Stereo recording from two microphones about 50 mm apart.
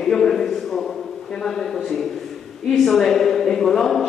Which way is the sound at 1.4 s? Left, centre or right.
Centre.